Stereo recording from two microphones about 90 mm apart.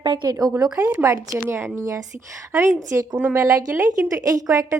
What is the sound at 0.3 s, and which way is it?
Speech, 45° right (ahead or behind).